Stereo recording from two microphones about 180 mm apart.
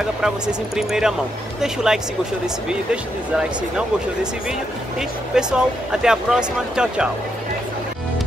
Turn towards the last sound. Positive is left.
turn(degrees=-5)  # may be behind; listen again after turning